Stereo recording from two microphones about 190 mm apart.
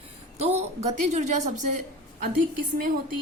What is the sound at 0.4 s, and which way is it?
A woman's voice, 35° right (ahead or behind).